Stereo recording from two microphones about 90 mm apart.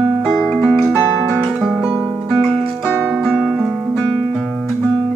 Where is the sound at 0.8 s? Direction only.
15° left (ahead or behind).